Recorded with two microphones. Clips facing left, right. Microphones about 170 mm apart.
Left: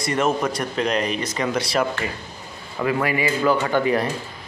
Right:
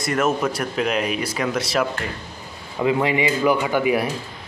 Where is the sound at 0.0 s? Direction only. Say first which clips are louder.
Even; centre (ahead or behind).